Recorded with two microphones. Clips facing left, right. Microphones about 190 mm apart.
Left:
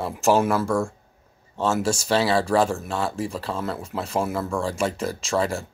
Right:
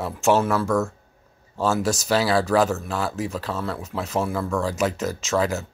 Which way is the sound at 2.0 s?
Centre (ahead or behind).